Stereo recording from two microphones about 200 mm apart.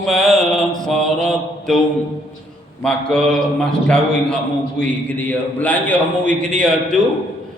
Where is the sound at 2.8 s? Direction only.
5° left (ahead or behind).